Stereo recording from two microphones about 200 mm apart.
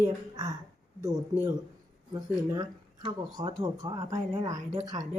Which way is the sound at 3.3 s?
20° right (ahead or behind).